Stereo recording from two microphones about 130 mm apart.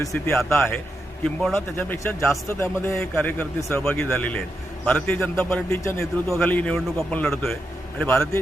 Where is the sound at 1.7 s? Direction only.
15° left (ahead or behind).